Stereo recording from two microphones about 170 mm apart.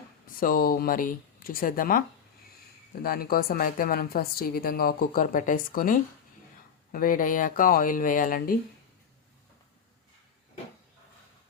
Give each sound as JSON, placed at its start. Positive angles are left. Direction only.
{"t": 0.3, "sound": "a woman's voice", "side_deg": 55}